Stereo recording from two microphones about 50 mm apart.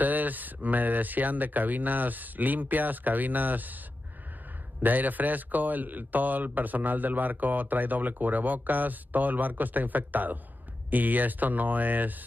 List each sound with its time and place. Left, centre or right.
0.0 s speech: right
4.8 s speech: right